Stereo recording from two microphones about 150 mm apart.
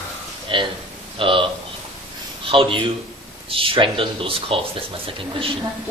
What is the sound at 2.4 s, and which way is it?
Speech, 35° right (ahead or behind).